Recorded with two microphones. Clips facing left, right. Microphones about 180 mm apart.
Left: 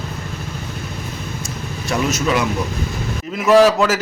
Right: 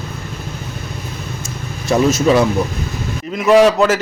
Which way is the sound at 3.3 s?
Centre (ahead or behind).